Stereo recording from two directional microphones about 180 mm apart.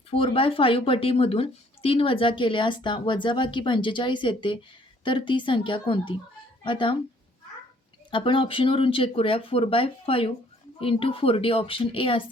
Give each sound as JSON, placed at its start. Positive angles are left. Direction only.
{"t": 0.1, "sound": "speech", "side_deg": 30}
{"t": 8.1, "sound": "a woman's voice", "side_deg": 30}